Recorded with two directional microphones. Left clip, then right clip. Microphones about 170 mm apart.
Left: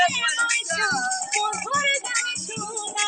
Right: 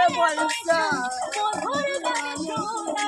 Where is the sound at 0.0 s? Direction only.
20° left (ahead or behind).